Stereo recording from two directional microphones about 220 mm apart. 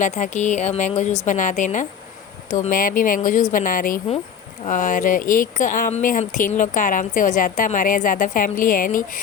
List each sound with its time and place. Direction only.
0.0 s speech: 35° left (ahead or behind)